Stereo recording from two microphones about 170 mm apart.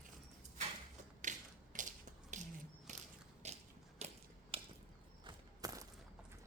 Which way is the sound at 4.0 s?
40° right (ahead or behind).